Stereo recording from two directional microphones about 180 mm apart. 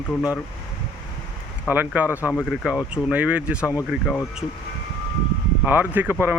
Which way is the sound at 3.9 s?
5° left (ahead or behind).